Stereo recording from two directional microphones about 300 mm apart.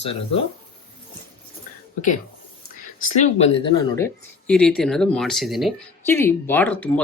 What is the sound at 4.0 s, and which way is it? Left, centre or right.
Speech, centre.